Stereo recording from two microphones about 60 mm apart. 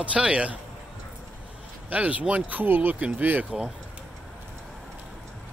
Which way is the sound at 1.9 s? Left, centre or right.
Right.